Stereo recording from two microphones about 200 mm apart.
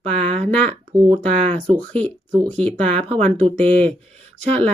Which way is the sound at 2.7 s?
5° left (ahead or behind).